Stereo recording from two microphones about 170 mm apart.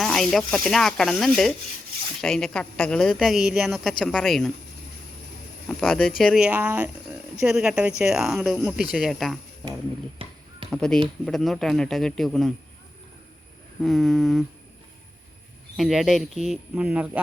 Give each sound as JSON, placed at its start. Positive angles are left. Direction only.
{"t": 0.0, "sound": "a woman's voice", "side_deg": 0}
{"t": 5.6, "sound": "a woman's voice", "side_deg": 5}
{"t": 10.2, "sound": "finger snapping", "side_deg": -35}
{"t": 10.7, "sound": "a woman's voice", "side_deg": 5}
{"t": 13.8, "sound": "a woman's voice", "side_deg": 0}
{"t": 15.8, "sound": "a woman's voice", "side_deg": 0}